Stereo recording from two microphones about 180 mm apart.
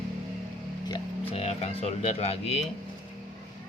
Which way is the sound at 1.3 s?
35° left (ahead or behind).